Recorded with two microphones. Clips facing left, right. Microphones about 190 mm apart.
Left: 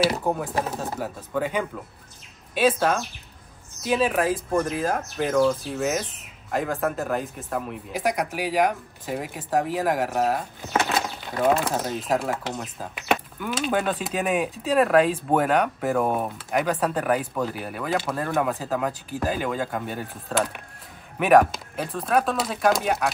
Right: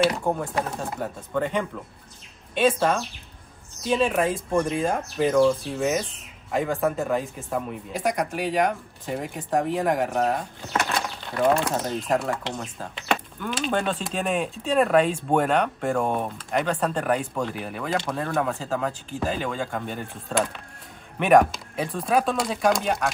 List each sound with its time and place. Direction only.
0.0 s speech: 5° left (ahead or behind)
10.7 s a sound: 20° left (ahead or behind)
11.3 s speech: 5° left (ahead or behind)